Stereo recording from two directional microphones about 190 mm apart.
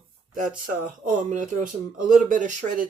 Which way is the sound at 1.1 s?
40° right (ahead or behind).